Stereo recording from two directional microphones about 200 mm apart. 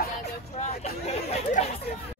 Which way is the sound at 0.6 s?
30° left (ahead or behind).